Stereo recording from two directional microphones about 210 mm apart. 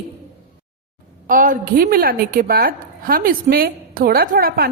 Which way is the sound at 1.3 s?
40° right (ahead or behind).